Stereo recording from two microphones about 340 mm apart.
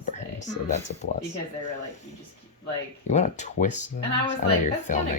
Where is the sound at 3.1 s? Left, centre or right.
Centre.